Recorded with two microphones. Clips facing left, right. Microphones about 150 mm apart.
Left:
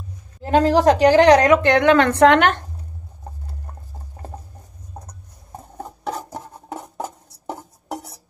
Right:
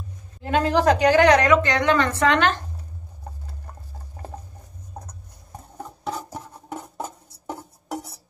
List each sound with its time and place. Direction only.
0.4 s a woman's voice: 35° left (ahead or behind)
1.5 s a woman's voice: 60° left (ahead or behind)